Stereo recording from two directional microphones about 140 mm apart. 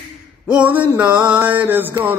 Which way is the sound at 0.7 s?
10° right (ahead or behind).